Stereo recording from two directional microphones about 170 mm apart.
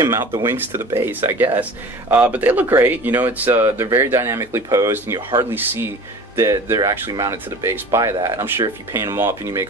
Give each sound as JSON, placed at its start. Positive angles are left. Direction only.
{"t": 0.0, "sound": "speech", "side_deg": -15}